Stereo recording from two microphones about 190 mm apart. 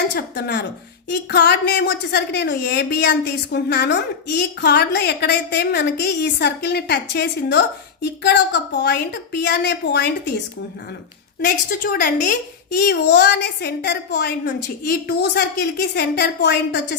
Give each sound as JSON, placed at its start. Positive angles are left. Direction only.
{"t": 0.1, "sound": "a woman's voice", "side_deg": 60}
{"t": 11.4, "sound": "a woman's voice", "side_deg": 50}